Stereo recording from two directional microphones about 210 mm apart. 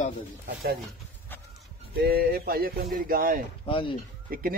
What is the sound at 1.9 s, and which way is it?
A man's voice, 45° right (ahead or behind).